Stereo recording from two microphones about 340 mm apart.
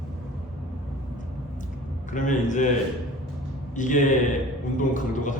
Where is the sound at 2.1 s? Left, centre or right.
Left.